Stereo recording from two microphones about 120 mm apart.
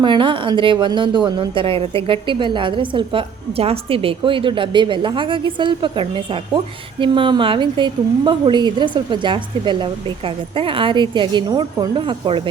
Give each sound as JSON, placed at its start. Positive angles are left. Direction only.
{"t": 0.0, "sound": "a woman's voice", "side_deg": -40}